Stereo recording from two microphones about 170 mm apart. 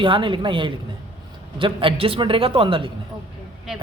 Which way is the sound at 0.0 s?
30° right (ahead or behind).